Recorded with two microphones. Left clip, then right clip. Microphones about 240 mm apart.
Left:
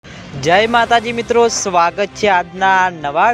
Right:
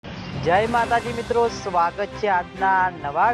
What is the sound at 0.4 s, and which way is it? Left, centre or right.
Speech, left.